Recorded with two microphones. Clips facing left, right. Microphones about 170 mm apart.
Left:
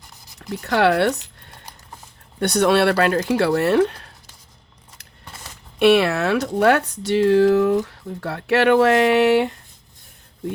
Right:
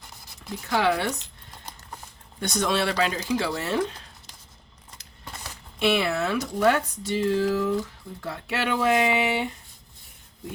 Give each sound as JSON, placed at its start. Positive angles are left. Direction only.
{"t": 0.3, "sound": "speech", "side_deg": 70}
{"t": 2.4, "sound": "speech", "side_deg": 65}
{"t": 5.8, "sound": "speech", "side_deg": 65}